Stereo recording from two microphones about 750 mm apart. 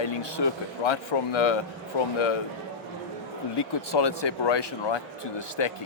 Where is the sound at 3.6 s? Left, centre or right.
Left.